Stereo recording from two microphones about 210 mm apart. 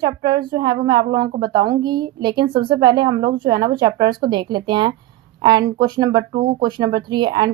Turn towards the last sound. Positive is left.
turn(degrees=-20)  # may be behind; listen again after turning